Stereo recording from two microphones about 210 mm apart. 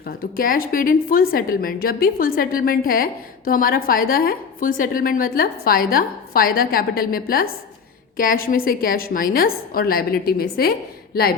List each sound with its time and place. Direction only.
0.2 s a woman's voice: 45° left (ahead or behind)